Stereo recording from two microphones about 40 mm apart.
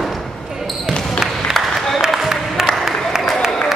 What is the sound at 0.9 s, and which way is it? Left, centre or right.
Basketball bounce, centre.